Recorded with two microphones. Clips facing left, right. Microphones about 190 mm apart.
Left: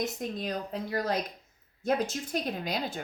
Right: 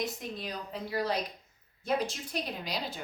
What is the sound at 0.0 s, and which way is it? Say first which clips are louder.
Speech: left 3 dB; 45° left (ahead or behind).